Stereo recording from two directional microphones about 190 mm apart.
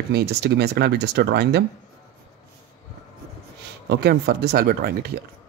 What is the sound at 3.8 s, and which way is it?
Speech, 60° right (ahead or behind).